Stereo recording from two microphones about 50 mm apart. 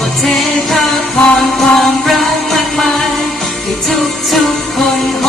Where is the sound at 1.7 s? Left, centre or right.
Centre.